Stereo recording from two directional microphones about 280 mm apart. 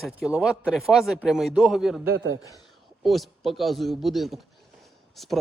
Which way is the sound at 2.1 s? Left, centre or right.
Right.